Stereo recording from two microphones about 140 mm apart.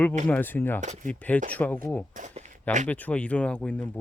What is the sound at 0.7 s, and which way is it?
Speech, 60° right (ahead or behind).